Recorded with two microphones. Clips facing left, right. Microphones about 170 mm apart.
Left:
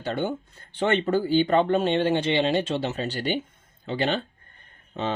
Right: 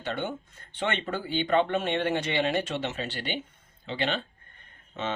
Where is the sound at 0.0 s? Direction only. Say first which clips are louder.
Left 5 dB; 35° left (ahead or behind).